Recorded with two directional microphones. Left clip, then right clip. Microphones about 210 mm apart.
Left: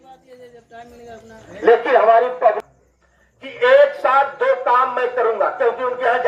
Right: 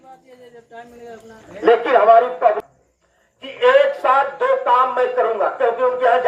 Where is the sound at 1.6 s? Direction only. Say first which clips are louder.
Even; 10° left (ahead or behind).